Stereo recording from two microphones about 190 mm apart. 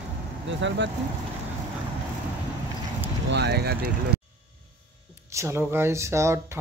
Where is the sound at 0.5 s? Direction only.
75° right (ahead or behind).